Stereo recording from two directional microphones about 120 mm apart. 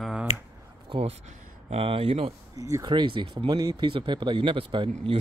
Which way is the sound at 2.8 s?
40° right (ahead or behind).